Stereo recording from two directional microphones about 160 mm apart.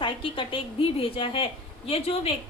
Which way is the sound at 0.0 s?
30° left (ahead or behind).